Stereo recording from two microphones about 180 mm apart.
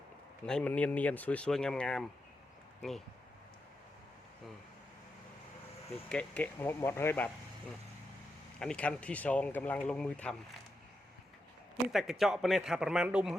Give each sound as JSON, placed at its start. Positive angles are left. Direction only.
{"t": 0.4, "sound": "a man's voice", "side_deg": 5}
{"t": 6.1, "sound": "speech", "side_deg": 5}
{"t": 8.5, "sound": "speech", "side_deg": 5}
{"t": 11.9, "sound": "a man's voice", "side_deg": 0}